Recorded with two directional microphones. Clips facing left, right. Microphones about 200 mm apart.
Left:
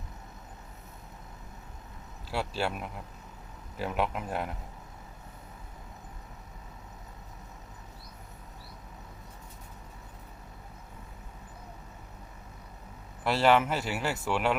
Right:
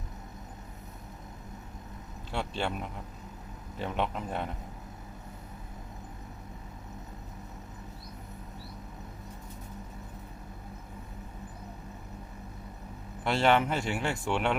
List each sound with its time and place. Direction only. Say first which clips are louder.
2.3 s speech: left 1 dB; 5° left (ahead or behind)
3.8 s speech: left 1 dB; 5° left (ahead or behind)
13.2 s speech: left 1 dB; 5° left (ahead or behind)